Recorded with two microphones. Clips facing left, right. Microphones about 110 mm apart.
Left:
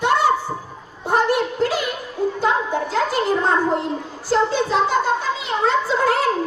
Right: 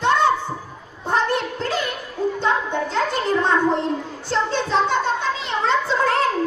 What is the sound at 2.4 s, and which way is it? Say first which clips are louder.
Music: left 2 dB; 5° left (ahead or behind).